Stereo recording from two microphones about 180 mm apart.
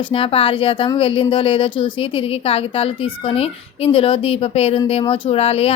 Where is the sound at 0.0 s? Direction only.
30° left (ahead or behind).